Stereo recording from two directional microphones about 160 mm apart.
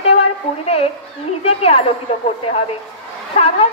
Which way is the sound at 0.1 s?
40° left (ahead or behind).